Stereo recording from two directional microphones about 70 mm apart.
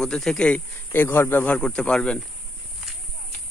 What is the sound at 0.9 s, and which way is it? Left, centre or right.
Speech, left.